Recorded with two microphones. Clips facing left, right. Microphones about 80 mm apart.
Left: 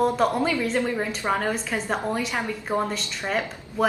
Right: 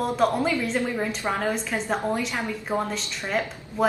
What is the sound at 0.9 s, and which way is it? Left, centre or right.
Speech, centre.